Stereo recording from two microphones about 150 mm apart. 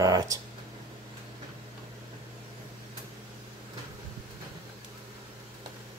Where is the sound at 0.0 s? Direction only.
25° right (ahead or behind).